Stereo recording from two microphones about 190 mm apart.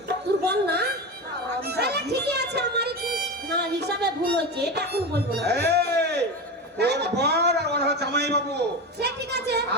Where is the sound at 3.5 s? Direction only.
60° right (ahead or behind).